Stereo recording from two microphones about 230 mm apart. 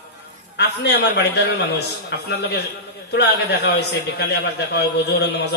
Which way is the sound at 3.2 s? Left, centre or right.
Left.